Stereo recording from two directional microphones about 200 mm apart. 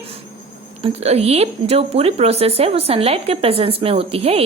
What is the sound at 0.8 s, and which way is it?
Speech, 30° right (ahead or behind).